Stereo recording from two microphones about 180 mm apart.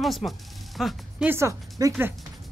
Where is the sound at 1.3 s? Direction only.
15° right (ahead or behind).